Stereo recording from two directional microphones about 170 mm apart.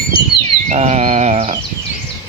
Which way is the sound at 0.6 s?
40° right (ahead or behind).